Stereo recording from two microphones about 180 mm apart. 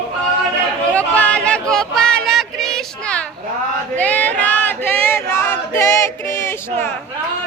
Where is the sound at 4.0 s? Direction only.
10° left (ahead or behind).